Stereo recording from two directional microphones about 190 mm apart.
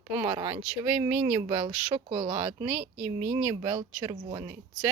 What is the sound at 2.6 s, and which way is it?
Speech, 5° right (ahead or behind).